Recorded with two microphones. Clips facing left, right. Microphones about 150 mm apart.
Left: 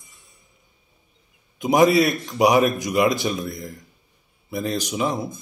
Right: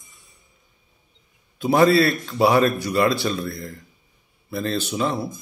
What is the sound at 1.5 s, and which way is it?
A man's voice, 15° left (ahead or behind).